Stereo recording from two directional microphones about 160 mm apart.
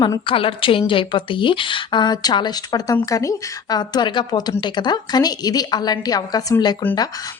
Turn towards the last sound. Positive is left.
turn(degrees=25)  # may be behind; listen again after turning